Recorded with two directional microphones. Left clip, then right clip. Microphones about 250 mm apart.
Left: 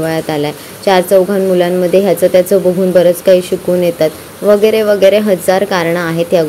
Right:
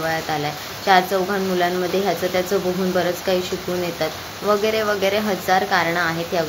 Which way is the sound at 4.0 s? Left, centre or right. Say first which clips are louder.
Left 11 dB; left.